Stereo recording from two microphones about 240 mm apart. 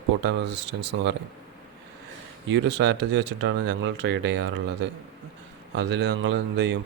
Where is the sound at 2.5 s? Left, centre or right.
Right.